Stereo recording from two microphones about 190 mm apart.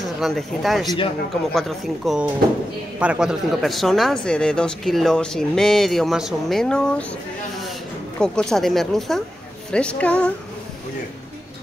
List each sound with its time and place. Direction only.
0.0 s speech: centre (ahead or behind)
0.8 s a man's voice: 25° left (ahead or behind)
1.5 s speech: centre (ahead or behind)
8.2 s speech: 5° left (ahead or behind)